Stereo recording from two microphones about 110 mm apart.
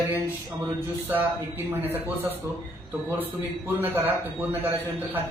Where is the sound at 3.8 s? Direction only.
20° right (ahead or behind).